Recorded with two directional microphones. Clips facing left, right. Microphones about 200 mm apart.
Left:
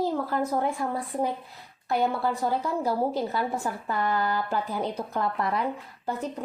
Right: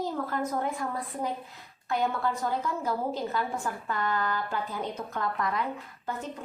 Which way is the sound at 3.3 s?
35° left (ahead or behind).